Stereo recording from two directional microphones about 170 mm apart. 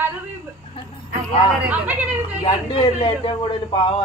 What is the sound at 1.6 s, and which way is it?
Speech, 10° right (ahead or behind).